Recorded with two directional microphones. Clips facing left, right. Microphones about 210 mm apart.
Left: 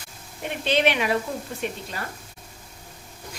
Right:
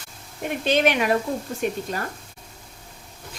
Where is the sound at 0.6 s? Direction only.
45° right (ahead or behind).